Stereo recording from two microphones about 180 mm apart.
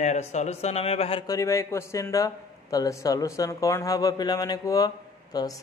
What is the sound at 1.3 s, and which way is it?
A man's voice, 15° left (ahead or behind).